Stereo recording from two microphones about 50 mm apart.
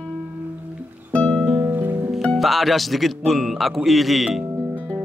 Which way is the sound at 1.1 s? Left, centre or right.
Centre.